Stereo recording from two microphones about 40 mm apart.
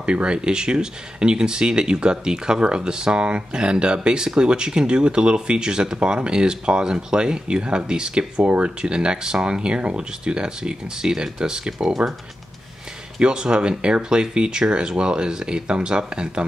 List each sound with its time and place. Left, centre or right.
0.0 s speech: right
13.2 s speech: right